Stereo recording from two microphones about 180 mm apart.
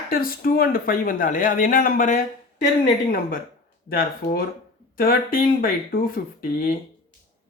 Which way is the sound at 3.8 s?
55° left (ahead or behind).